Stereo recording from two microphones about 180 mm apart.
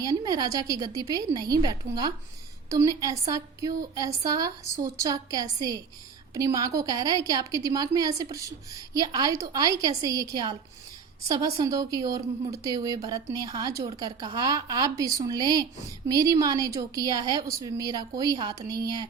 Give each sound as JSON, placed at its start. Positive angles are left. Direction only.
{"t": 0.0, "sound": "a woman's voice", "side_deg": -20}
{"t": 11.3, "sound": "a woman's voice", "side_deg": -20}